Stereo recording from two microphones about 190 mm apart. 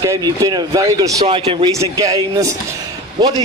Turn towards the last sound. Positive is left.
turn(degrees=-20)  # may be behind; listen again after turning